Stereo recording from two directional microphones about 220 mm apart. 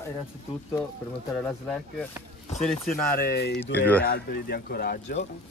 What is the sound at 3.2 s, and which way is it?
Speech, 45° left (ahead or behind).